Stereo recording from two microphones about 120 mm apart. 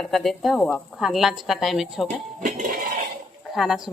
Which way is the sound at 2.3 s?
90° right.